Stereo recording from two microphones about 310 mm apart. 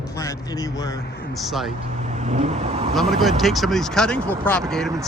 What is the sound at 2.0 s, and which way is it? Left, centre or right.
Speech, right.